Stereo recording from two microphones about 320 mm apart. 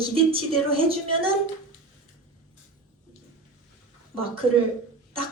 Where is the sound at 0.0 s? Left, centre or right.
Centre.